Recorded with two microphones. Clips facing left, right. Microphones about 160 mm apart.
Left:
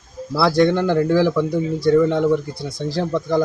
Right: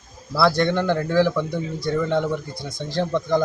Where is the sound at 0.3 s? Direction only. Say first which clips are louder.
Left 3 dB; 5° left (ahead or behind).